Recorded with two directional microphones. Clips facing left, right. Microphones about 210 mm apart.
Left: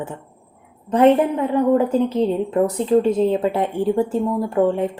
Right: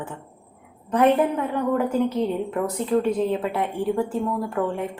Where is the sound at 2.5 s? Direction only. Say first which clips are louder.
Left 7 dB; 25° left (ahead or behind).